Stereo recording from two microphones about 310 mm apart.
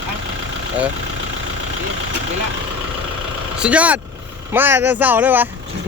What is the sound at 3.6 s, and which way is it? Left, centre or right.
Speech, centre.